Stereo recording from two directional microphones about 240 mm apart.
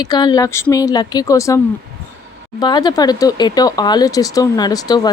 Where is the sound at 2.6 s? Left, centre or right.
Centre.